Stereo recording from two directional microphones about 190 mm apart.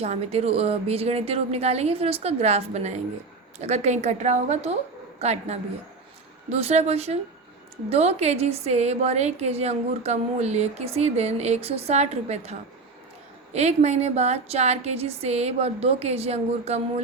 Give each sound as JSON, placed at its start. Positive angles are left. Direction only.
{"t": 0.0, "sound": "a woman's voice", "side_deg": -35}